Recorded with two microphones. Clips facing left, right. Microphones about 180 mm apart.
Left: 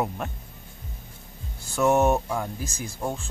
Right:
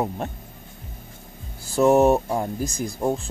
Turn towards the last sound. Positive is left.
turn(degrees=-35)  # may be behind; listen again after turning